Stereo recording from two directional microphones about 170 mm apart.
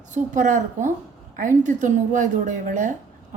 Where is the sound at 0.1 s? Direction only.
50° right (ahead or behind).